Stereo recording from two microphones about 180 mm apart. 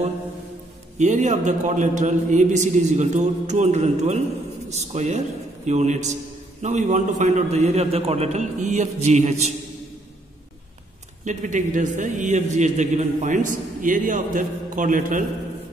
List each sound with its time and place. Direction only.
0.9 s a man's voice: 40° right (ahead or behind)
11.2 s a man's voice: 45° right (ahead or behind)